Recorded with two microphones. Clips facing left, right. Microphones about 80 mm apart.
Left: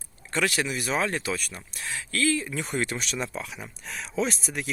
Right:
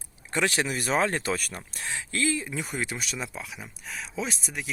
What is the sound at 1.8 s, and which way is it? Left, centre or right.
Speech, right.